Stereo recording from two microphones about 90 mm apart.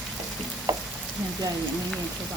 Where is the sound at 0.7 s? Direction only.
45° right (ahead or behind).